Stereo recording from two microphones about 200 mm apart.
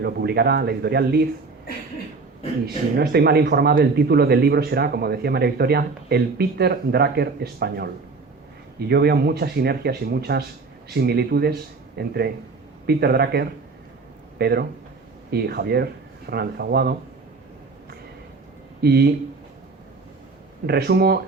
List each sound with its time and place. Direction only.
0.0 s speech: 55° right (ahead or behind)
2.6 s speech: 50° right (ahead or behind)
8.9 s speech: 55° right (ahead or behind)
18.8 s speech: 55° right (ahead or behind)
20.7 s speech: 55° right (ahead or behind)